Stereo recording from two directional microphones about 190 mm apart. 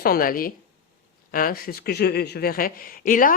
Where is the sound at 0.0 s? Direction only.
50° left (ahead or behind).